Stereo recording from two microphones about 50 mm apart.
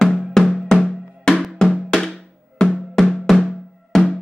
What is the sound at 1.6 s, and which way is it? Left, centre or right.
Music, centre.